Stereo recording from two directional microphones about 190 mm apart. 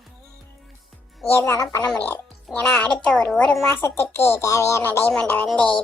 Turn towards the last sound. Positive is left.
turn(degrees=5)  # may be behind; listen again after turning